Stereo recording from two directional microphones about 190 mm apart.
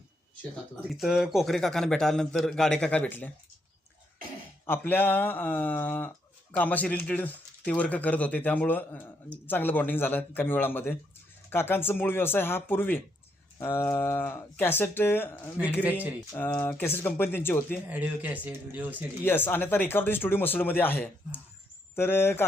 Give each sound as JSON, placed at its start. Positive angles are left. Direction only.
{"t": 0.5, "sound": "speech", "side_deg": 0}
{"t": 4.6, "sound": "speech", "side_deg": 10}
{"t": 17.8, "sound": "speech", "side_deg": -10}
{"t": 19.2, "sound": "speech", "side_deg": 10}